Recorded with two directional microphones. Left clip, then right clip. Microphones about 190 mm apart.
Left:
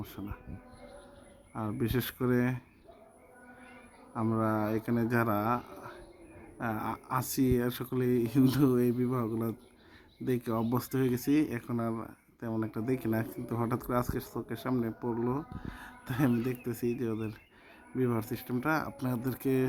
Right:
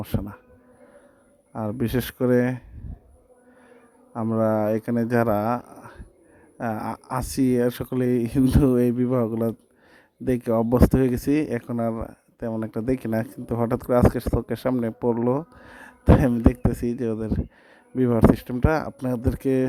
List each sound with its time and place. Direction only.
0.0 s speech: 50° right (ahead or behind)
1.5 s speech: 45° right (ahead or behind)
4.1 s speech: 40° right (ahead or behind)